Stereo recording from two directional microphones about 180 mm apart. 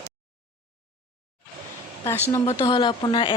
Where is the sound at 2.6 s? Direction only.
25° left (ahead or behind).